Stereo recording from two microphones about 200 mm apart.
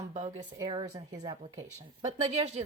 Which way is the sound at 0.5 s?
20° right (ahead or behind).